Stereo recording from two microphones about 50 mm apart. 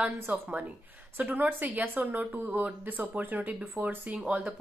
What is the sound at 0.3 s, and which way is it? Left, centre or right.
Speech, right.